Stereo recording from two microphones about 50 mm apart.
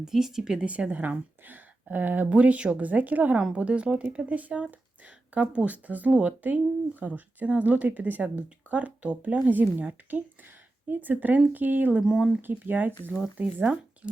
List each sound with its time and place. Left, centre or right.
0.0 s speech: centre
0.6 s speech: right
12.0 s speech: centre
12.4 s speech: right